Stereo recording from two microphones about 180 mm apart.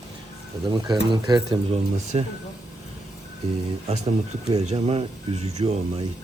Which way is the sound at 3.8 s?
40° right (ahead or behind).